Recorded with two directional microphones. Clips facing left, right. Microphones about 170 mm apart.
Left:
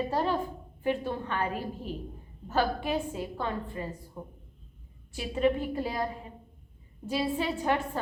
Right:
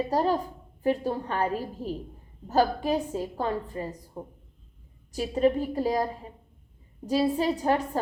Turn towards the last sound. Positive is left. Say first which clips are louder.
# right 4 dB
turn(degrees=-40)  # may be behind; listen again after turning